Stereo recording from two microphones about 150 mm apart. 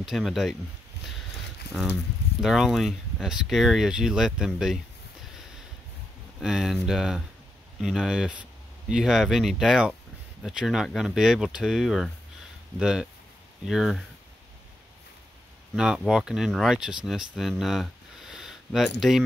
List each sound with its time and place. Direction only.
0.0 s speech: centre (ahead or behind)
1.6 s speech: 90° left
2.4 s speech: centre (ahead or behind)
6.4 s speech: centre (ahead or behind)
15.7 s speech: 5° right (ahead or behind)